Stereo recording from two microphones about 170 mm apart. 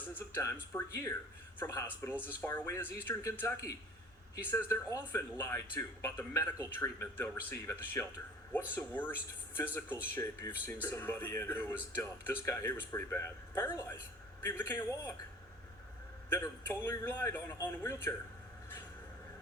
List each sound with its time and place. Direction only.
0.1 s speech: 15° left (ahead or behind)
16.3 s speech: 10° left (ahead or behind)